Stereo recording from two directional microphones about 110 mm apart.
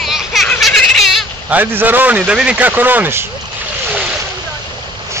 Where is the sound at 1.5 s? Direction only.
15° right (ahead or behind).